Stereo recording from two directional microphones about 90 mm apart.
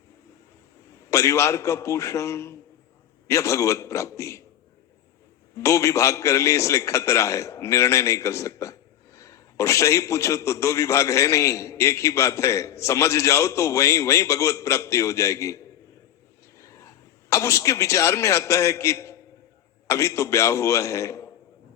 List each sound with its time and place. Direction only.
1.1 s a man's voice: 35° left (ahead or behind)
5.5 s a man's voice: 35° left (ahead or behind)